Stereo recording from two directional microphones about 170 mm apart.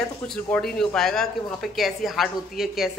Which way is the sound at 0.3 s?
5° left (ahead or behind).